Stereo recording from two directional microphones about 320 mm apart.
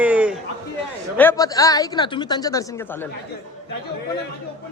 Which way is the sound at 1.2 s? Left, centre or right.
Centre.